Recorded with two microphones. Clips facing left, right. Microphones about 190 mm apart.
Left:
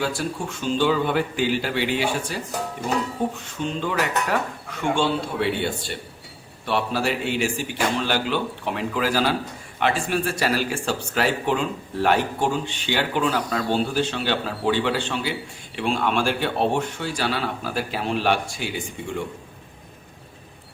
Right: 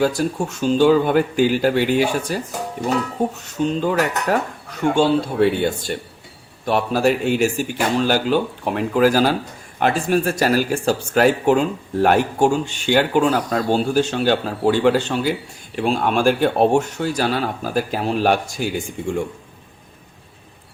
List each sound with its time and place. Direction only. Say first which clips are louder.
0.0 s speech: right 7 dB; 40° right (ahead or behind)
3.3 s dishes: right 7 dB; 40° right (ahead or behind)
6.7 s speech: right 6 dB; 45° right (ahead or behind)